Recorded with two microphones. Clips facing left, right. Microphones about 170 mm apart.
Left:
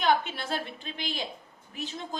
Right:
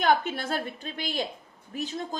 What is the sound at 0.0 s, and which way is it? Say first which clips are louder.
A woman's voice: right 2 dB; 45° right (ahead or behind).